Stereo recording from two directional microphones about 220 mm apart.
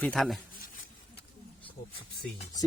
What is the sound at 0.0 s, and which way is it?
Speech, centre (ahead or behind).